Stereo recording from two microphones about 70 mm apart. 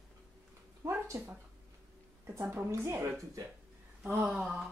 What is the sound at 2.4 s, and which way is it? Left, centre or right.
Speech, right.